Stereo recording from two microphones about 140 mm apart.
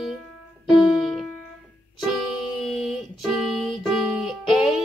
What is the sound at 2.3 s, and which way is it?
Music, 5° right (ahead or behind).